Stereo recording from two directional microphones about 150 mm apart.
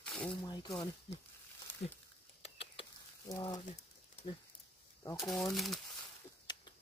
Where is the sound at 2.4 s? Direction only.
40° left (ahead or behind).